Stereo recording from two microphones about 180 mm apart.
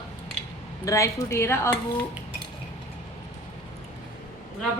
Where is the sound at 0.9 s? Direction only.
15° left (ahead or behind).